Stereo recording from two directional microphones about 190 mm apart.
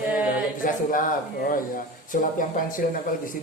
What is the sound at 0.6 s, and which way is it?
A woman's voice, 45° left (ahead or behind).